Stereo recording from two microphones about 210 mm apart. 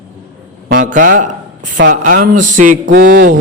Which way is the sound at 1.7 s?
40° right (ahead or behind).